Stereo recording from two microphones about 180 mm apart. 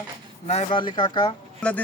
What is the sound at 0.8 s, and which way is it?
Speech, 25° left (ahead or behind).